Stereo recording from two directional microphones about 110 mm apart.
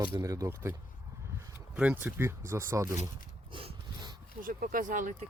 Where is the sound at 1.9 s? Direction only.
20° right (ahead or behind).